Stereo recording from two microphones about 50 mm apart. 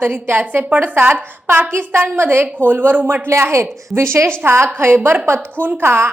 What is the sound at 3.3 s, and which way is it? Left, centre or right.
A woman's voice, right.